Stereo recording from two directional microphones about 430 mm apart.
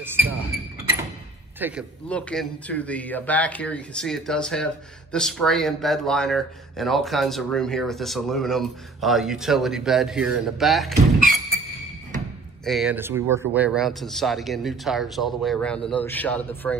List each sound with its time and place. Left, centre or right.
0.0 s a sound: centre
1.6 s speech: centre
12.6 s speech: centre